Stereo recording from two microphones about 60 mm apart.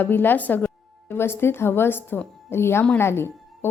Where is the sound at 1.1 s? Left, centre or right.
Left.